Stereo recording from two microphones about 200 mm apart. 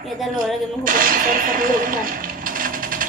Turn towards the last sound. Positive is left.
turn(degrees=-40)  # may be behind; listen again after turning